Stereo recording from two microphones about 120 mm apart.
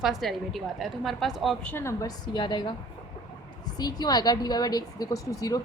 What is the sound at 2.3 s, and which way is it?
A woman's voice, 40° left (ahead or behind).